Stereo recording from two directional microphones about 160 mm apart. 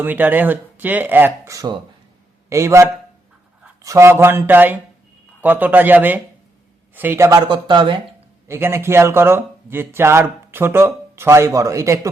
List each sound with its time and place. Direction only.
0.0 s a man's voice: 10° right (ahead or behind); by 8.0 s 30° right (ahead or behind)
8.4 s a man's voice: 15° right (ahead or behind)